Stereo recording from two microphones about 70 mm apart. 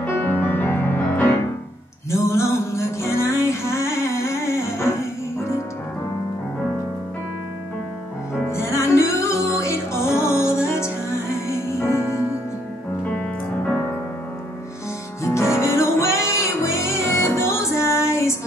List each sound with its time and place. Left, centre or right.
0.0 s music: left
2.0 s music: left
8.5 s music: left
13.7 s music: left
15.2 s music: left